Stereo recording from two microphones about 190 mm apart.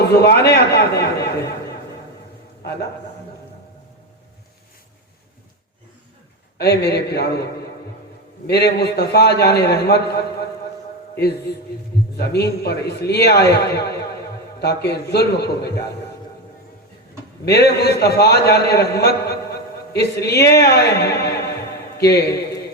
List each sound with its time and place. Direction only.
0.1 s a man's voice: 60° left (ahead or behind)
6.6 s a man's voice: 60° left (ahead or behind)
8.4 s a man's voice: 60° left (ahead or behind)
12.1 s a man's voice: 55° left (ahead or behind)
17.4 s a man's voice: 60° left (ahead or behind)